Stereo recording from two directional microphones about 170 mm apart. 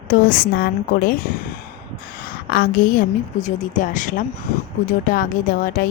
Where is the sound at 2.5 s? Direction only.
55° left (ahead or behind).